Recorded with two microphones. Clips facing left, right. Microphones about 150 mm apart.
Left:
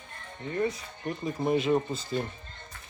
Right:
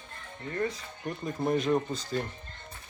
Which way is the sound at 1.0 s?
5° left (ahead or behind).